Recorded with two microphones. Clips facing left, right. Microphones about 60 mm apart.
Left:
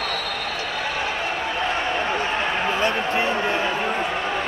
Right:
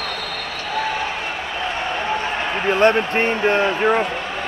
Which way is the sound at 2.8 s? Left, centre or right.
Right.